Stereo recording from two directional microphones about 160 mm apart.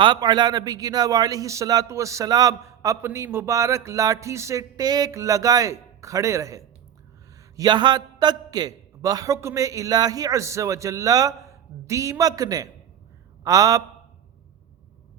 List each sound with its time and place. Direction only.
0.0 s a man's voice: 25° right (ahead or behind)